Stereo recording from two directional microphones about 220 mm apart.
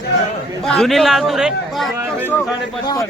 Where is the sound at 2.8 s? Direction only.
15° left (ahead or behind).